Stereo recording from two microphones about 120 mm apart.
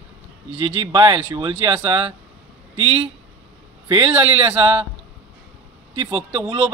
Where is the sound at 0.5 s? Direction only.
45° right (ahead or behind).